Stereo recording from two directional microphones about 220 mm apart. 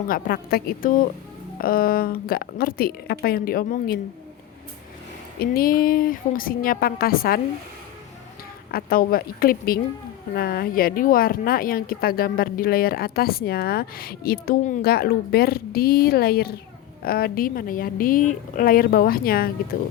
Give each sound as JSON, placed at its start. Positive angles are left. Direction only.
{"t": 0.1, "sound": "a woman's voice", "side_deg": 45}
{"t": 5.4, "sound": "a woman's voice", "side_deg": 40}
{"t": 8.7, "sound": "a woman's voice", "side_deg": 40}